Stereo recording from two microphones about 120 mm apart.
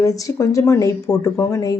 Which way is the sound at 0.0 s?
25° left (ahead or behind).